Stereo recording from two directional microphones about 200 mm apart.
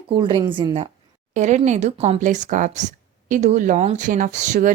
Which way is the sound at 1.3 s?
35° right (ahead or behind).